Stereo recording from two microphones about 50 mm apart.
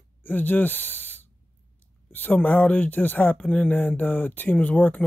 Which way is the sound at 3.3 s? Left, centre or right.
Left.